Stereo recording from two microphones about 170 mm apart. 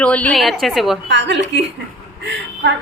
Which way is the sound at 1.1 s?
90° right.